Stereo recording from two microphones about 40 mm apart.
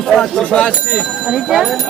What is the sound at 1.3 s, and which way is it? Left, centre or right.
Speech, centre.